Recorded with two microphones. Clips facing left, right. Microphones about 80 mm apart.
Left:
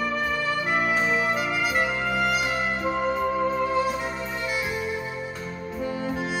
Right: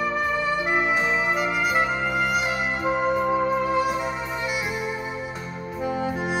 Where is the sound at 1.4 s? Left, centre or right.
Centre.